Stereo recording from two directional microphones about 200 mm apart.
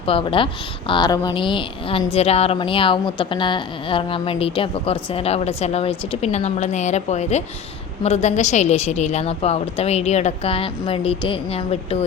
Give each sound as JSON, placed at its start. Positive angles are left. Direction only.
{"t": 0.0, "sound": "a woman's voice", "side_deg": 25}